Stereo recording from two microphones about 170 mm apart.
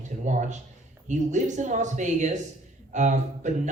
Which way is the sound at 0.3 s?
45° right (ahead or behind).